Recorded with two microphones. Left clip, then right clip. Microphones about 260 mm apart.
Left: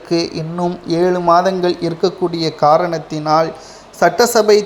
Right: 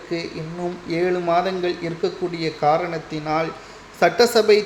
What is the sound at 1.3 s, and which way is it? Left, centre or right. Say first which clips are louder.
Speech: left 9 dB; centre.